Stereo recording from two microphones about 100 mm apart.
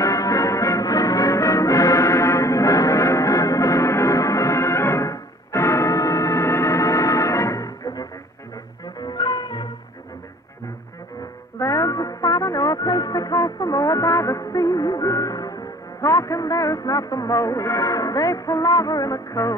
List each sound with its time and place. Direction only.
0.0 s music: 35° left (ahead or behind)
11.6 s music: 35° left (ahead or behind)